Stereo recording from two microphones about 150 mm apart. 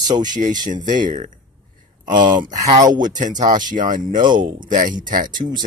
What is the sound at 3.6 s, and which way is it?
Speech, 60° right (ahead or behind).